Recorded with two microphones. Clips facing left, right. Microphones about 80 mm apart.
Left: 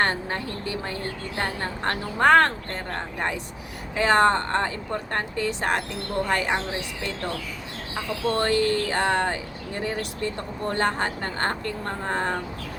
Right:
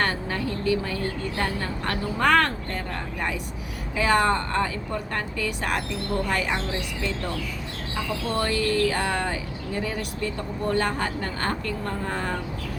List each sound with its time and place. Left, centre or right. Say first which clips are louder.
0.0 s a woman's voice: left 1 dB; left
3.9 s a woman's voice: left 2 dB; left
8.4 s a woman's voice: even; left